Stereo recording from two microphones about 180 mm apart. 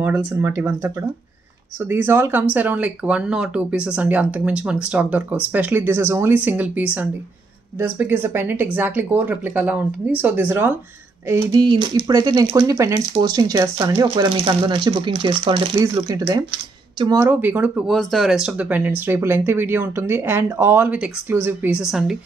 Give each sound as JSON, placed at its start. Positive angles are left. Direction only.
{"t": 0.0, "sound": "speech", "side_deg": -10}